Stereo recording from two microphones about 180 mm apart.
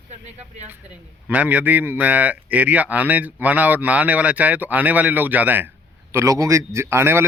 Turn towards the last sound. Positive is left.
turn(degrees=-15)  # may be behind; listen again after turning